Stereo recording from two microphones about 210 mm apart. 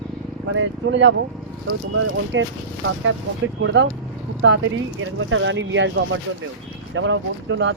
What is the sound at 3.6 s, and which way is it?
Speech, 60° right (ahead or behind).